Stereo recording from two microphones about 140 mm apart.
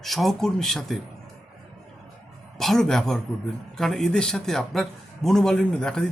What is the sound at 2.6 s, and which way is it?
A man's voice, 5° left (ahead or behind).